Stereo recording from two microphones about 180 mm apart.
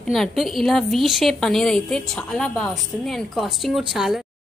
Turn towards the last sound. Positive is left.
turn(degrees=0)  # may be behind; listen again after turning